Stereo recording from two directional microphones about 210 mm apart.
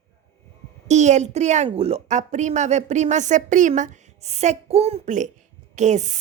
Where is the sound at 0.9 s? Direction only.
35° right (ahead or behind).